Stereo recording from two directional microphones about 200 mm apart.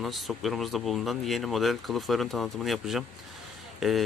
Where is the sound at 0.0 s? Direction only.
Centre (ahead or behind).